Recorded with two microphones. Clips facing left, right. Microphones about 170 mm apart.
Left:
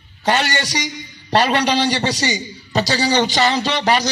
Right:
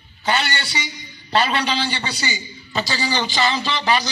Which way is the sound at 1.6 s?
80° left.